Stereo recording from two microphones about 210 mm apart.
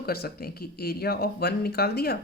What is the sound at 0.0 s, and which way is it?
Speech, 45° left (ahead or behind).